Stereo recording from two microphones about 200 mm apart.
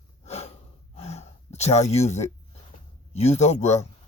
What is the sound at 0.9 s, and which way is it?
Gasp, 30° left (ahead or behind).